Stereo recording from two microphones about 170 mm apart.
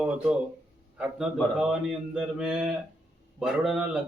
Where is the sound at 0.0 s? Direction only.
5° right (ahead or behind).